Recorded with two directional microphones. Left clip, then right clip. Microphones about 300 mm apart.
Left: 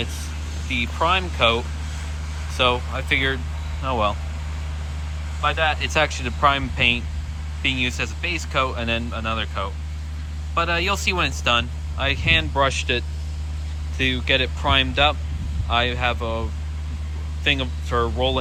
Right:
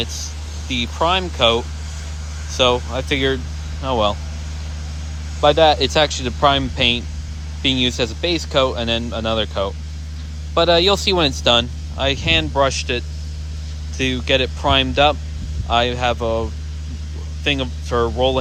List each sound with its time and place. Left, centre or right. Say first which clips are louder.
0.7 s speech: right 2 dB; centre
5.4 s speech: right 8 dB; right